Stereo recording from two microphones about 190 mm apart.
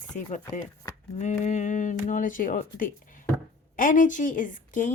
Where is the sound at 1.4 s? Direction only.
40° left (ahead or behind).